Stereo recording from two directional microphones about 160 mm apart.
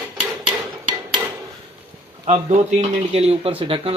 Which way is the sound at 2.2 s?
45° right (ahead or behind).